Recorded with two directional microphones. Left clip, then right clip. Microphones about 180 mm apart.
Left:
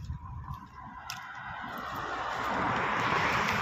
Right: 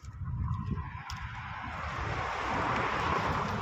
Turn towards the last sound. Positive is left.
turn(degrees=35)  # may be behind; listen again after turning